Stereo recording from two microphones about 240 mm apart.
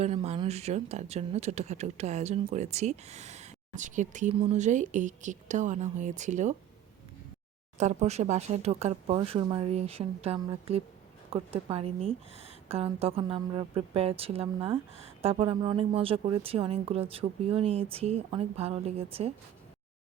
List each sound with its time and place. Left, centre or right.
0.0 s a woman's voice: right
7.8 s a woman's voice: right